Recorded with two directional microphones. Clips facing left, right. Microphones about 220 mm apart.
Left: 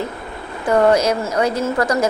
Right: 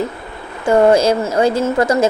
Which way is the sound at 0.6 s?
25° right (ahead or behind).